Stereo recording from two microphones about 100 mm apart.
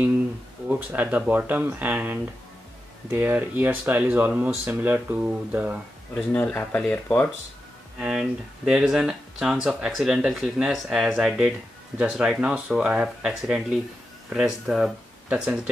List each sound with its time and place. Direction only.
0.7 s speech: 15° right (ahead or behind)
6.3 s speech: 15° left (ahead or behind)
8.0 s speech: 10° right (ahead or behind)